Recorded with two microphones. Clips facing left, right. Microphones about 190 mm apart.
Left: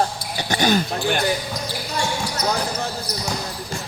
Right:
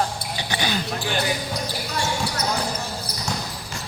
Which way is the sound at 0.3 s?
45° left (ahead or behind).